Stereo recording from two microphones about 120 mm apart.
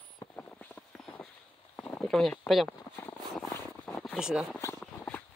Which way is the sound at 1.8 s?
10° left (ahead or behind).